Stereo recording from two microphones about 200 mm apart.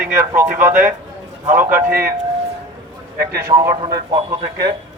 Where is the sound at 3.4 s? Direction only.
15° right (ahead or behind).